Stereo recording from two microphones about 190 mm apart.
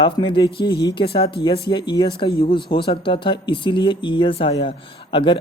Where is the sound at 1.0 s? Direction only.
30° left (ahead or behind).